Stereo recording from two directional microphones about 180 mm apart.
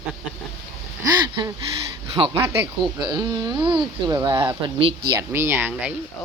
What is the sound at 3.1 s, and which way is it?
Speech, 20° right (ahead or behind).